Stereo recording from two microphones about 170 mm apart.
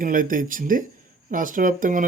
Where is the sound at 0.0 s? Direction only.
50° right (ahead or behind).